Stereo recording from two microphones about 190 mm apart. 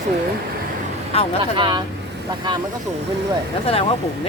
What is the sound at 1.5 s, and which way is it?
Speech, 25° right (ahead or behind).